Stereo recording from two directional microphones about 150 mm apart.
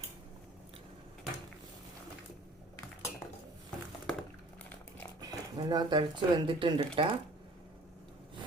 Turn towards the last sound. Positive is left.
turn(degrees=-35)  # may be behind; listen again after turning